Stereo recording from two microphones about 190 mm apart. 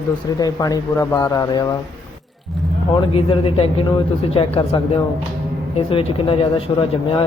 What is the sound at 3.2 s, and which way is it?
Speech, 30° left (ahead or behind).